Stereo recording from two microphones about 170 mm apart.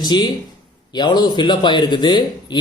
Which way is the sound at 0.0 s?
25° left (ahead or behind).